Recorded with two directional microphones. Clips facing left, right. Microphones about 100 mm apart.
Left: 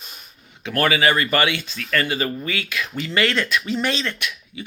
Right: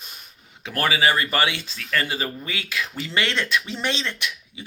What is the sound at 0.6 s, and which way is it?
Speech, 25° right (ahead or behind).